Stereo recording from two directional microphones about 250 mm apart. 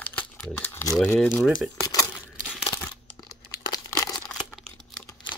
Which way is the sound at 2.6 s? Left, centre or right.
Centre.